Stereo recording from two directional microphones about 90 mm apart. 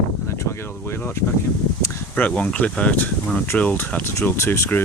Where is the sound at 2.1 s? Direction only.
15° left (ahead or behind).